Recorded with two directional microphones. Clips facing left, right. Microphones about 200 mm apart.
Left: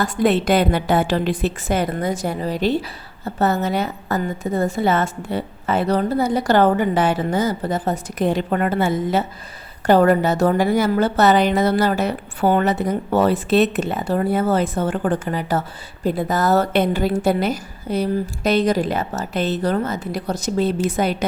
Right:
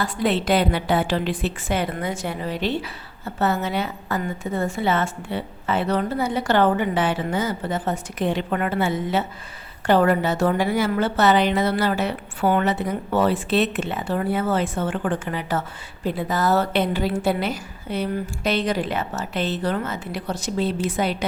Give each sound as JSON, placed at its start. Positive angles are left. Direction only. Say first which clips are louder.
{"t": 0.0, "sound": "a woman's voice", "louder": "left 5 dB", "side_deg": 45}